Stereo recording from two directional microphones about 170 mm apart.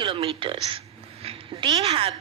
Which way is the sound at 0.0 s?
30° right (ahead or behind).